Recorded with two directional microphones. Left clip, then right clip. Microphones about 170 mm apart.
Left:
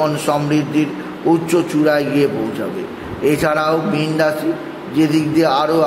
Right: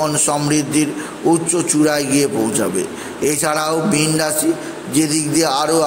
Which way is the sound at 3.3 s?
25° right (ahead or behind).